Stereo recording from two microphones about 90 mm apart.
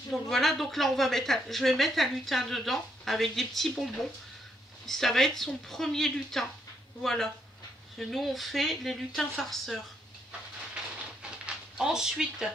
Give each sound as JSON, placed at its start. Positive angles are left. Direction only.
{"t": 0.1, "sound": "speech", "side_deg": 0}
{"t": 11.4, "sound": "speech", "side_deg": -5}